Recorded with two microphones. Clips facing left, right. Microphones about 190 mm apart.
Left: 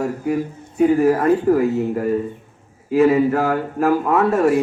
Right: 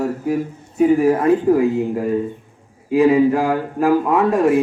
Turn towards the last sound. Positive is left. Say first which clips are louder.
# right 1 dB
turn(degrees=-15)  # may be behind; listen again after turning